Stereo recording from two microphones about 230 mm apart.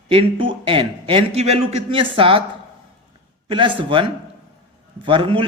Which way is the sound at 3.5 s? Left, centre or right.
Right.